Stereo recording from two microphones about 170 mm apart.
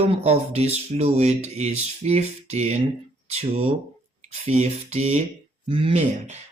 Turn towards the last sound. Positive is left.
turn(degrees=-35)  # may be behind; listen again after turning